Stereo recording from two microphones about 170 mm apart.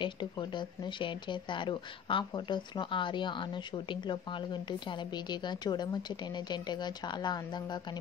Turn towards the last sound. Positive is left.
turn(degrees=25)  # may be behind; listen again after turning